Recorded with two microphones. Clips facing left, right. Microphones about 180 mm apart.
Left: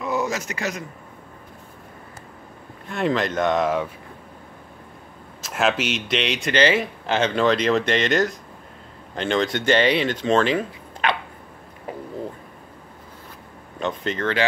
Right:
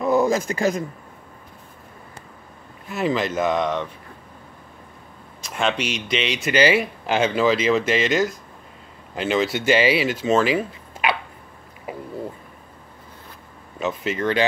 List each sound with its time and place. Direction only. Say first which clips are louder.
0.0 s a sound: right 6 dB; 55° right (ahead or behind)
0.5 s a man's voice: right 6 dB; 35° right (ahead or behind)
2.9 s speech: even; centre (ahead or behind)
5.4 s speech: left 1 dB; 5° left (ahead or behind)
13.7 s speech: right 1 dB; 5° right (ahead or behind)